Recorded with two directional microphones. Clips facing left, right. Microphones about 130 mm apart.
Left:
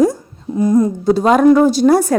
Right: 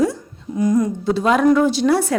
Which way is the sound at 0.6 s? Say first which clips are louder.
Left 4 dB; 30° left (ahead or behind).